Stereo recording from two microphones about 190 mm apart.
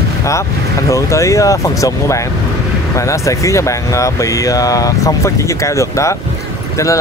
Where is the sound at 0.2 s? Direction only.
15° left (ahead or behind).